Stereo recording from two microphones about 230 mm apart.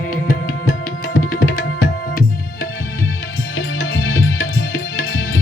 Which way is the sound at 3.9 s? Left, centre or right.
Left.